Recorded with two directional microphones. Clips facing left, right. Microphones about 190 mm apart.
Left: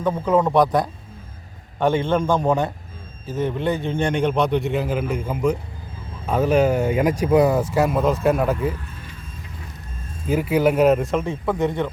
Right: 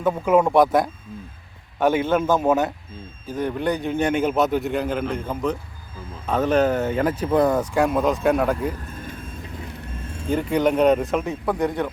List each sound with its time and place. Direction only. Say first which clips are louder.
0.0 s a man's voice: right 1 dB; 10° right (ahead or behind)
10.0 s vehicle: right 4 dB; 70° right (ahead or behind)
10.2 s a man's voice: left 2 dB; 5° left (ahead or behind)